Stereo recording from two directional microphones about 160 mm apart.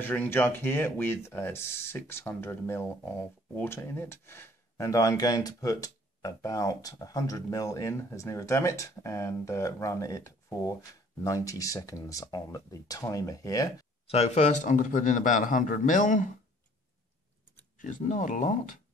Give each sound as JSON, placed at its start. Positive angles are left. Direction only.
{"t": 0.0, "sound": "speech", "side_deg": 10}
{"t": 14.0, "sound": "a man's voice", "side_deg": 40}
{"t": 17.7, "sound": "a man's voice", "side_deg": 55}